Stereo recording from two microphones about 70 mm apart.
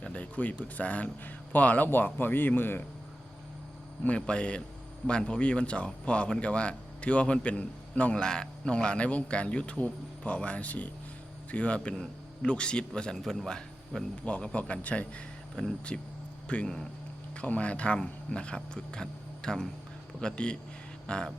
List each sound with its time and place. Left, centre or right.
0.0 s speech: centre
4.0 s speech: centre